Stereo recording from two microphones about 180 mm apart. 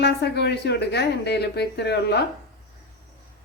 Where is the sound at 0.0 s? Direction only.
65° left (ahead or behind).